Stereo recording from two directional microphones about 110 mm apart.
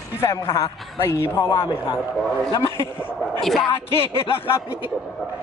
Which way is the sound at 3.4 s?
Centre (ahead or behind).